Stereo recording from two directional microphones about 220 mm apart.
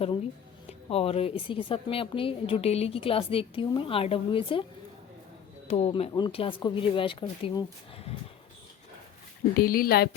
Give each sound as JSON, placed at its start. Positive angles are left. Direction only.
{"t": 0.7, "sound": "a woman's voice", "side_deg": 25}
{"t": 5.6, "sound": "a woman's voice", "side_deg": 30}
{"t": 9.6, "sound": "speech", "side_deg": 40}